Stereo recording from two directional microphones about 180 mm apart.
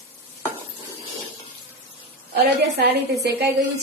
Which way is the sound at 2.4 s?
65° right (ahead or behind).